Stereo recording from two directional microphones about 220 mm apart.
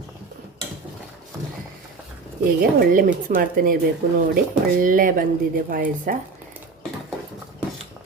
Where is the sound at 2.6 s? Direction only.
40° right (ahead or behind).